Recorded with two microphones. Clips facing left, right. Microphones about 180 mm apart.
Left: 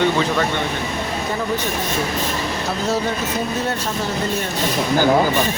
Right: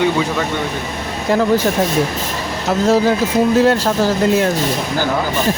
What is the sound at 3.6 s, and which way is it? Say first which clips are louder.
Speech: right 10 dB; 90° right.